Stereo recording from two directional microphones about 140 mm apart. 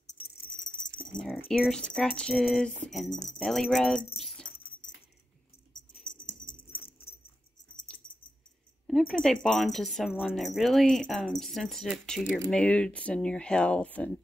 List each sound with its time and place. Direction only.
1.6 s speech: 5° left (ahead or behind)
3.1 s speech: 65° left (ahead or behind)
3.3 s speech: centre (ahead or behind)
6.7 s dog: 40° left (ahead or behind)
8.8 s a sound: centre (ahead or behind)
9.2 s speech: 5° left (ahead or behind)
12.4 s speech: 5° left (ahead or behind)